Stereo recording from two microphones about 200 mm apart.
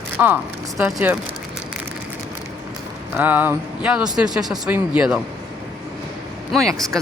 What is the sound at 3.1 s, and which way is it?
Speech, 10° right (ahead or behind).